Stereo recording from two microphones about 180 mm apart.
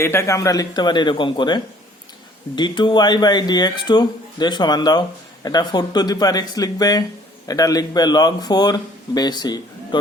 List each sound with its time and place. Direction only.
0.0 s speech: 15° left (ahead or behind)